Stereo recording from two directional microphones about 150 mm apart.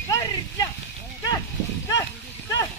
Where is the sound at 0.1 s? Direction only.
20° left (ahead or behind).